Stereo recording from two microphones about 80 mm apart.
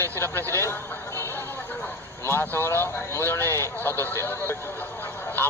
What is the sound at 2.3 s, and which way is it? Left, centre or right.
Speech, left.